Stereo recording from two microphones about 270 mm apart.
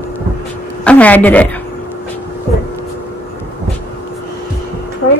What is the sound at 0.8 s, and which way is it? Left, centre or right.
Speech, centre.